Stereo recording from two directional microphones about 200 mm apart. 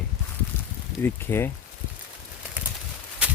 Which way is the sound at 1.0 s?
10° left (ahead or behind).